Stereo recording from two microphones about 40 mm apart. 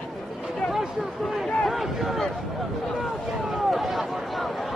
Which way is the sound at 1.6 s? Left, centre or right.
Centre.